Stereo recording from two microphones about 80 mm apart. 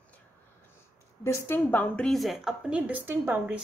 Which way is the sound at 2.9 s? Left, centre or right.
Right.